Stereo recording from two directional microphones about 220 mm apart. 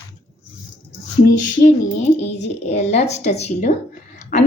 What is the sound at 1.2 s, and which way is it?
A woman's voice, 35° left (ahead or behind).